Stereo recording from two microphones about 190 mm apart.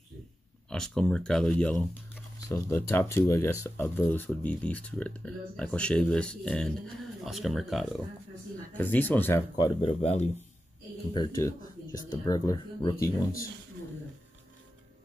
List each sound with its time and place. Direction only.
0.7 s speech: 5° left (ahead or behind)
8.7 s speech: 10° left (ahead or behind)
9.8 s speech: 35° left (ahead or behind)
11.1 s speech: 20° left (ahead or behind)